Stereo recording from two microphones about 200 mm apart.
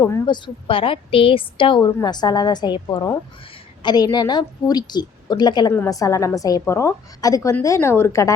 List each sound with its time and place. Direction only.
0.0 s a woman's voice: 20° left (ahead or behind)